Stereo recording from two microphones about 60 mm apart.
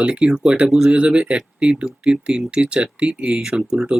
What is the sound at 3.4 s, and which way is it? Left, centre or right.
Speech, centre.